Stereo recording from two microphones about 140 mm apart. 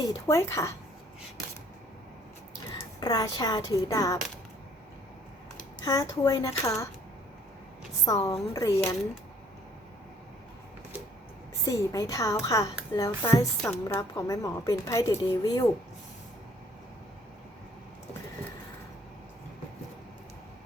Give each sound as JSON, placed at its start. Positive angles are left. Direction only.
{"t": 0.0, "sound": "a child's voice", "side_deg": 25}
{"t": 2.7, "sound": "speech", "side_deg": 30}
{"t": 5.8, "sound": "a child's voice", "side_deg": 25}
{"t": 8.0, "sound": "a child's voice", "side_deg": 25}
{"t": 11.6, "sound": "a child's voice", "side_deg": 25}